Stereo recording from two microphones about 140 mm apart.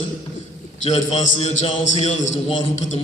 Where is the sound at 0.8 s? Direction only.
50° left (ahead or behind).